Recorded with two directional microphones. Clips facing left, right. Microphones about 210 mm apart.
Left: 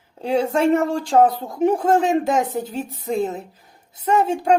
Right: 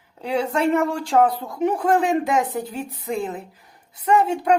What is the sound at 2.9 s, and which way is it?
Speech, 45° left (ahead or behind).